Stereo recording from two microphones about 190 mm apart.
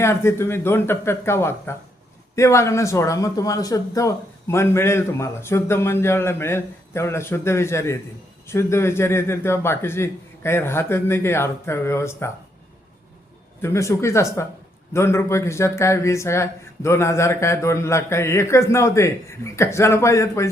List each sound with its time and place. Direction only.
0.0 s speech: 15° left (ahead or behind)
13.6 s speech: 15° left (ahead or behind)